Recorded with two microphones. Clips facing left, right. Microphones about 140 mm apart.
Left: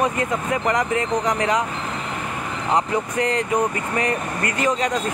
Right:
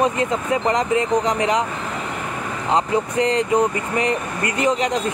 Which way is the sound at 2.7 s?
30° right (ahead or behind).